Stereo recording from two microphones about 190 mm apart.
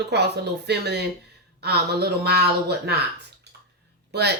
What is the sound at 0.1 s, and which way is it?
Speech, 60° right (ahead or behind).